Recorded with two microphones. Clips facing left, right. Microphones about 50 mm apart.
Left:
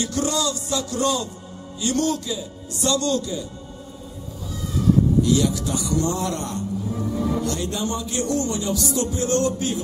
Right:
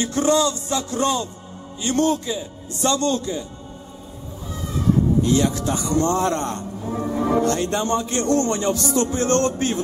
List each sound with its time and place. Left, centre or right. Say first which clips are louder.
0.0 s a man's voice: right 5 dB; right
5.2 s speech: right 1 dB; right